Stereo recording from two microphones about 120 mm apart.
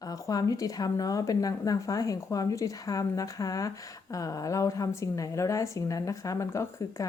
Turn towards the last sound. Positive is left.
turn(degrees=25)  # may be behind; listen again after turning